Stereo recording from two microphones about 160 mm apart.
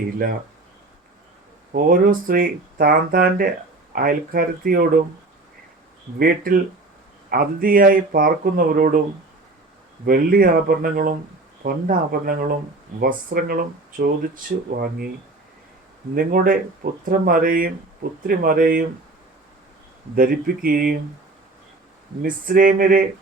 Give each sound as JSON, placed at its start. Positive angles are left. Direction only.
{"t": 1.7, "sound": "speech", "side_deg": -60}
{"t": 6.1, "sound": "speech", "side_deg": -65}
{"t": 10.1, "sound": "speech", "side_deg": -65}
{"t": 16.1, "sound": "speech", "side_deg": -60}
{"t": 20.1, "sound": "speech", "side_deg": -65}
{"t": 22.2, "sound": "speech", "side_deg": -60}